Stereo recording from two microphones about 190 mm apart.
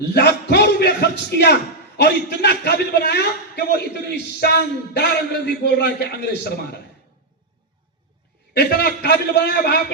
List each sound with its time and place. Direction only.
0.1 s a sound: 65° left (ahead or behind)
2.0 s a man's voice: 60° left (ahead or behind)
8.5 s a man's voice: 60° left (ahead or behind)